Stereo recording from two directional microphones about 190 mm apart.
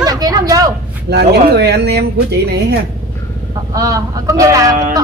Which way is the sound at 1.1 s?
60° right (ahead or behind).